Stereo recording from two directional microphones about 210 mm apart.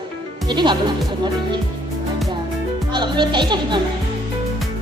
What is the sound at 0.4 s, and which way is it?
Speech, 20° right (ahead or behind).